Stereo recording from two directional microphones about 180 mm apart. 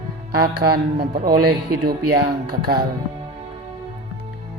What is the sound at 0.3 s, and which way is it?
Speech, 60° right (ahead or behind).